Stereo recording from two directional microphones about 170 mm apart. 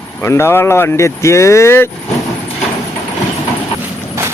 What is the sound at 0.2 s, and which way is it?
Speech, 15° left (ahead or behind).